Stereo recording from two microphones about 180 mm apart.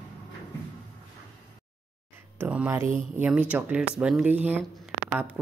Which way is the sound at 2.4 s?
10° right (ahead or behind).